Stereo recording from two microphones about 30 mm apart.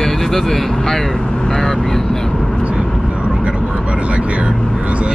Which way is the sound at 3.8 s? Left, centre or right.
Right.